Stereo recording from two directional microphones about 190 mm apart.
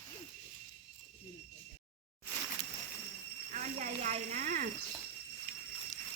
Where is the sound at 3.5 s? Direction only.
40° right (ahead or behind).